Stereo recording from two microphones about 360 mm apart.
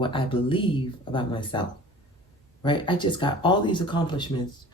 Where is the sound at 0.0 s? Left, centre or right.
Centre.